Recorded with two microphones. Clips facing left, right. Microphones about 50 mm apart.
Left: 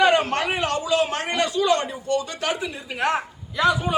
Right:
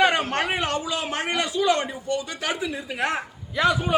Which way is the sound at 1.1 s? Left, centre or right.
Right.